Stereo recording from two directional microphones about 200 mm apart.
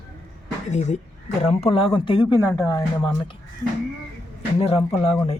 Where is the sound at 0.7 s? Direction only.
35° left (ahead or behind).